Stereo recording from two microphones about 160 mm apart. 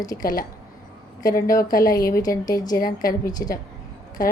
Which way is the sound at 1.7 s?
65° left (ahead or behind).